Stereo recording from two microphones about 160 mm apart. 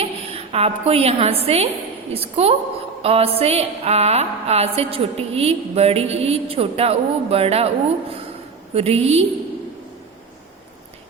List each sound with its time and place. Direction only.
0.0 s a woman's voice: 40° right (ahead or behind)
2.1 s music: 40° right (ahead or behind)
8.7 s music: 40° right (ahead or behind)